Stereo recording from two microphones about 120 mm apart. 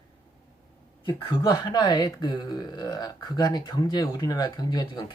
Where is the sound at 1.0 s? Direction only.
40° left (ahead or behind).